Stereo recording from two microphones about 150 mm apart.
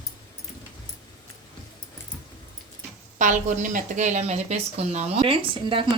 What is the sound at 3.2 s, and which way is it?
Speech, 55° right (ahead or behind).